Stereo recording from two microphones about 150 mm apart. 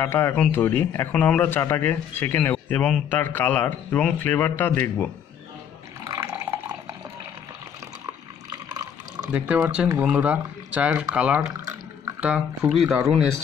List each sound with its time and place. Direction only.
0.0 s a man's voice: 15° left (ahead or behind)
6.0 s water: 20° right (ahead or behind)
8.5 s water: 25° right (ahead or behind)
9.3 s speech: 10° right (ahead or behind)